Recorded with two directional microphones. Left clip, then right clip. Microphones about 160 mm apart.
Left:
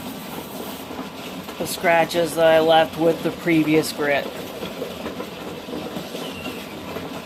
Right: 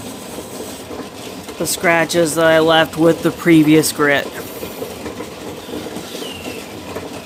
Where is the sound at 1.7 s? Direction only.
70° right (ahead or behind).